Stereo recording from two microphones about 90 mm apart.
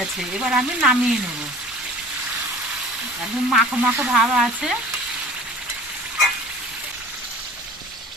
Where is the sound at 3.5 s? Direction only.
5° right (ahead or behind).